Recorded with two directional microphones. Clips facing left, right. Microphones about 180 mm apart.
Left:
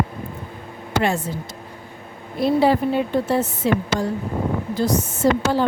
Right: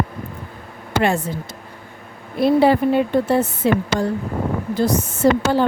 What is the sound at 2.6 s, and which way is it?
A woman's voice, 60° right (ahead or behind).